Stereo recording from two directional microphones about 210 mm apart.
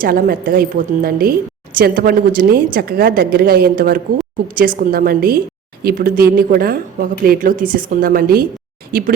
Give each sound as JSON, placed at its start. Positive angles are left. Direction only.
{"t": 0.0, "sound": "speech", "side_deg": -45}